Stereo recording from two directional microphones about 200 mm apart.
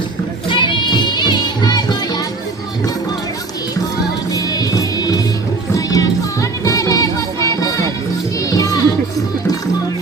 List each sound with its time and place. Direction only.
0.5 s music: 25° left (ahead or behind)
4.3 s music: 15° left (ahead or behind)
8.5 s children playing: 15° left (ahead or behind)